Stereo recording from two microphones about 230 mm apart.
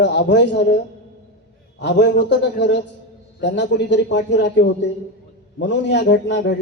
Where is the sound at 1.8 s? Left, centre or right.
Left.